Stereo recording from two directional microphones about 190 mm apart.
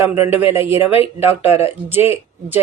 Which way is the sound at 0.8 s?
30° left (ahead or behind).